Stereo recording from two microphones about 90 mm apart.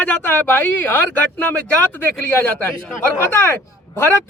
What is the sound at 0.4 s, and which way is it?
Speech, 25° left (ahead or behind).